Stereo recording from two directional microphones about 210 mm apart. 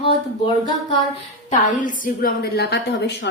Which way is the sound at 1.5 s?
35° left (ahead or behind).